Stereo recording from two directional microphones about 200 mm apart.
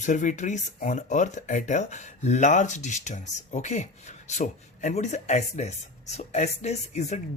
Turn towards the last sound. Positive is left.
turn(degrees=35)  # may be behind; listen again after turning